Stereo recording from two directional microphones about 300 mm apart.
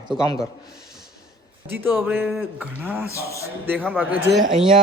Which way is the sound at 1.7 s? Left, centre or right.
Centre.